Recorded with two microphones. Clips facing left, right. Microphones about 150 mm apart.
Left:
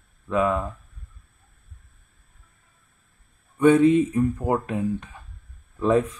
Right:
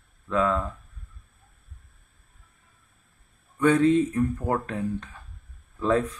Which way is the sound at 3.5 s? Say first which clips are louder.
Left 4 dB; 15° left (ahead or behind).